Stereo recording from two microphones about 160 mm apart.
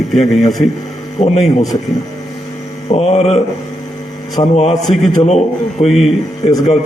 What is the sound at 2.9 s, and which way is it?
Speech, 40° left (ahead or behind).